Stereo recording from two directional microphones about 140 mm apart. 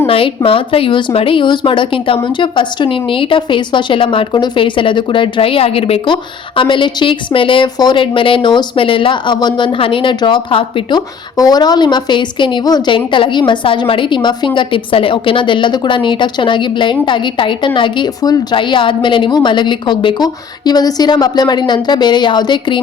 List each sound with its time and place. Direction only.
0.1 s a woman's voice: 40° left (ahead or behind)
11.3 s a woman's voice: 30° left (ahead or behind)